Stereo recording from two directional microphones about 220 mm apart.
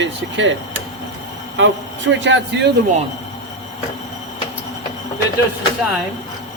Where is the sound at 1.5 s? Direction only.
55° right (ahead or behind).